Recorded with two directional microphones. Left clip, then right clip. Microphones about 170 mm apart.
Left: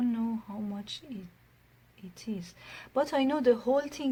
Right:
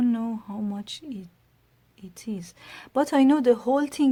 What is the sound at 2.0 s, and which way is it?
A woman's voice, 55° right (ahead or behind).